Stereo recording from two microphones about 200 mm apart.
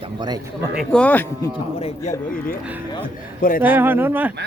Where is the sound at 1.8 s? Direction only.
40° left (ahead or behind).